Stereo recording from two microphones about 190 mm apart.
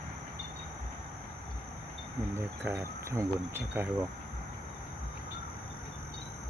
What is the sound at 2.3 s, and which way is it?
Speech, 15° right (ahead or behind).